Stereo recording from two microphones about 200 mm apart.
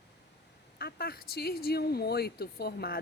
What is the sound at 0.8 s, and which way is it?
Speech, 50° left (ahead or behind).